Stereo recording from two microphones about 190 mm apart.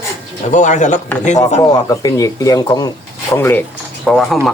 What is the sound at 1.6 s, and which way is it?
Speech, 20° left (ahead or behind).